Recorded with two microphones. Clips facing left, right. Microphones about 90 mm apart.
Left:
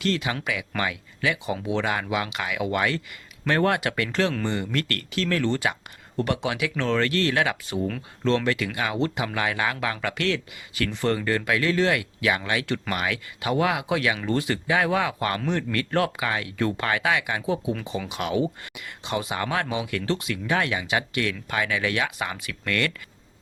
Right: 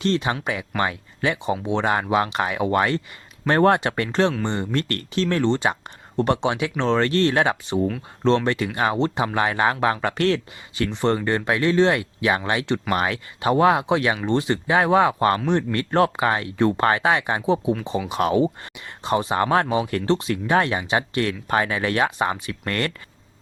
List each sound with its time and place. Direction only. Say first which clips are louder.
0.0 s speech: right 4 dB; 30° right (ahead or behind)
10.8 s speech: right 3 dB; 25° right (ahead or behind)